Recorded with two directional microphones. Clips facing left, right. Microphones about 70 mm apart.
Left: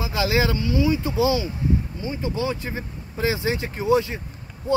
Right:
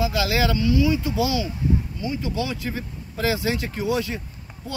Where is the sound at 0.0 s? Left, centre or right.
Left.